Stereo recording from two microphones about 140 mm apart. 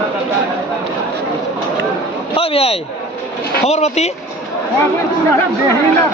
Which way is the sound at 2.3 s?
45° left (ahead or behind).